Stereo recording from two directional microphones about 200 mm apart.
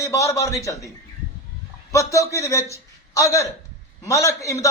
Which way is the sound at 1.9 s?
15° left (ahead or behind).